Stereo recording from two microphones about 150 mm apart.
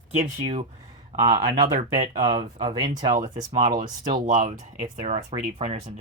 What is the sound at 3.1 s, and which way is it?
Speech, 65° right (ahead or behind).